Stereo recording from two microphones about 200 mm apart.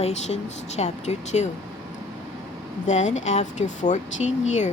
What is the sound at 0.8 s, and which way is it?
Speech, 35° left (ahead or behind).